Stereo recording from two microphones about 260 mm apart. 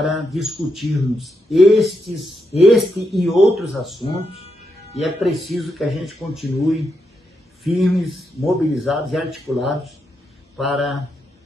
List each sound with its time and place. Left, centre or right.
0.0 s speech: centre
4.2 s speech: left
4.9 s speech: centre